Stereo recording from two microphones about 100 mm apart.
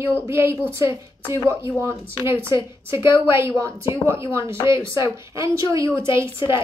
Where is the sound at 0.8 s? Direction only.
45° left (ahead or behind).